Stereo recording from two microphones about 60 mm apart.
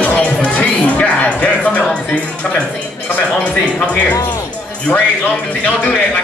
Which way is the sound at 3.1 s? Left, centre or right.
Left.